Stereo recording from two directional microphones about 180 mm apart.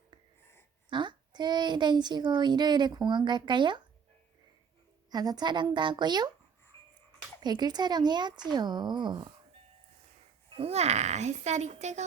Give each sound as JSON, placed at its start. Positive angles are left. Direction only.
{"t": 0.9, "sound": "a child's voice", "side_deg": -25}
{"t": 5.1, "sound": "speech", "side_deg": -20}
{"t": 7.4, "sound": "speech", "side_deg": -25}
{"t": 10.6, "sound": "a woman's voice", "side_deg": -35}